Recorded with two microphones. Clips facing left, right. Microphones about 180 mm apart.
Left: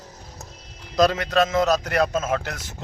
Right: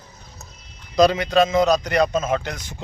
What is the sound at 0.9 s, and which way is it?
A man's voice, centre (ahead or behind).